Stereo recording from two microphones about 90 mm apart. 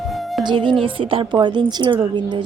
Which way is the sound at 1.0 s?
75° right (ahead or behind).